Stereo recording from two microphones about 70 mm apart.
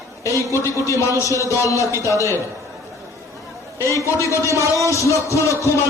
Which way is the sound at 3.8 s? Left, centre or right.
Left.